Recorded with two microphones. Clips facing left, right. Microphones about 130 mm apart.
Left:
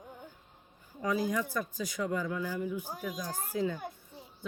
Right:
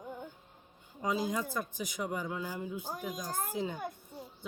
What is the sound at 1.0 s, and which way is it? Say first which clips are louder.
Speech: left 2 dB; 20° right (ahead or behind).